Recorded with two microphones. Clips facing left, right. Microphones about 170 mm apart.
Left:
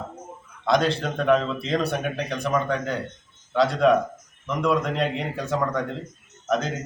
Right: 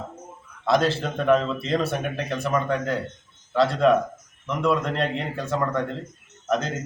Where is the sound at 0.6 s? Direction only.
Centre (ahead or behind).